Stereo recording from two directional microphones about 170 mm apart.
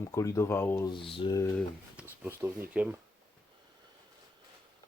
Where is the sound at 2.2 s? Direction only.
10° right (ahead or behind).